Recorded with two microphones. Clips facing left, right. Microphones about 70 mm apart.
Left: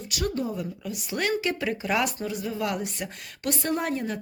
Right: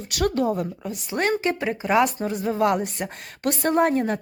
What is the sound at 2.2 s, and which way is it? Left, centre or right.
Speech, right.